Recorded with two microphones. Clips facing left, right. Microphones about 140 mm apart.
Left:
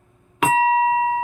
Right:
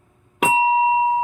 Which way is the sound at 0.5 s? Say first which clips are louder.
Right 1 dB; 15° right (ahead or behind).